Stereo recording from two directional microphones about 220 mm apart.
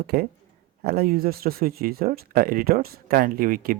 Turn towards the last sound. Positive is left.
turn(degrees=-40)  # may be behind; listen again after turning